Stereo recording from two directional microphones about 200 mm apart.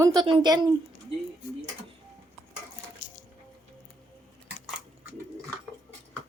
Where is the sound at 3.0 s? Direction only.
75° left (ahead or behind).